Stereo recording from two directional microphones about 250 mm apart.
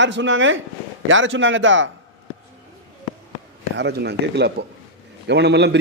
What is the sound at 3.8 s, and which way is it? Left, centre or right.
Music, right.